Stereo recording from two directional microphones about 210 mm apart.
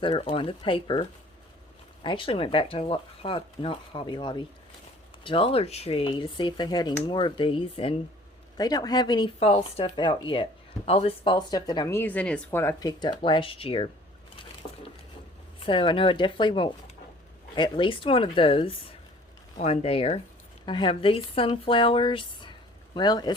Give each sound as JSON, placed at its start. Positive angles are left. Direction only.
{"t": 0.0, "sound": "speech", "side_deg": 25}
{"t": 2.0, "sound": "speech", "side_deg": 25}
{"t": 15.6, "sound": "speech", "side_deg": 25}